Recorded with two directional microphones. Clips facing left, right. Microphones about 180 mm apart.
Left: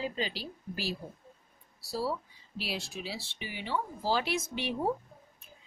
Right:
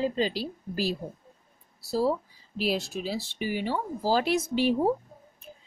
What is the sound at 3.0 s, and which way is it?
Speech, 45° right (ahead or behind).